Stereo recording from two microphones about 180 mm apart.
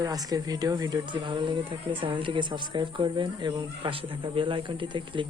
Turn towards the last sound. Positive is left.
turn(degrees=-25)  # may be behind; listen again after turning